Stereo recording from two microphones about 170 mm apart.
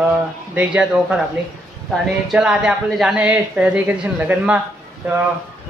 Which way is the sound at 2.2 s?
5° right (ahead or behind).